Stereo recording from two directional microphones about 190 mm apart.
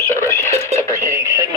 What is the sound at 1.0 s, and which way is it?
Speech, 15° right (ahead or behind).